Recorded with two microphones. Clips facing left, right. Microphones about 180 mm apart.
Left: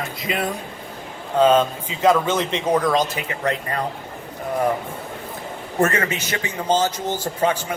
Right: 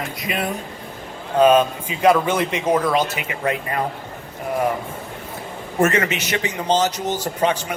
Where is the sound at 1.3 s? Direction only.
15° right (ahead or behind).